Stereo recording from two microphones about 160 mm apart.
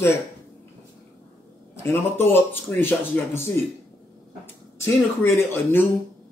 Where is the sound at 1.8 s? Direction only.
15° left (ahead or behind).